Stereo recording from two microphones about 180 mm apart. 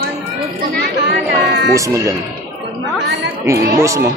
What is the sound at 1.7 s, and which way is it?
Speech, 15° right (ahead or behind).